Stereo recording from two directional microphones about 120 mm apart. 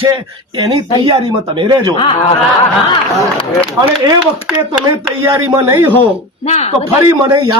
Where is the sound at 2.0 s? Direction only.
55° left (ahead or behind).